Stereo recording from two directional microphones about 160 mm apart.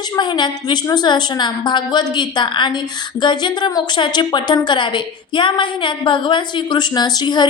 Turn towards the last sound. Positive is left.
turn(degrees=25)  # may be behind; listen again after turning